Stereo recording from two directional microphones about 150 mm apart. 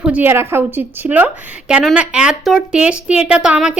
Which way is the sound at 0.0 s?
10° right (ahead or behind).